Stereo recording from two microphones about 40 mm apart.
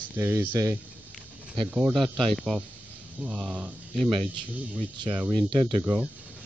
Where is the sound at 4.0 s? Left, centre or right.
Centre.